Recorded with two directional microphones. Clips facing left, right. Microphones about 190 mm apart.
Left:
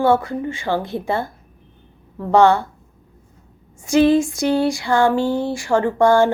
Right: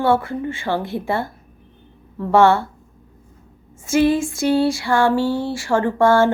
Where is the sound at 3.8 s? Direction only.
20° left (ahead or behind).